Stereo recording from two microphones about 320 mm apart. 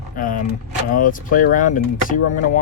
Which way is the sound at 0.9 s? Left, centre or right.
Left.